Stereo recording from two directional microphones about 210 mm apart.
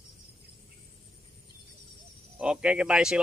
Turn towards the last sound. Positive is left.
turn(degrees=-5)  # may be behind; listen again after turning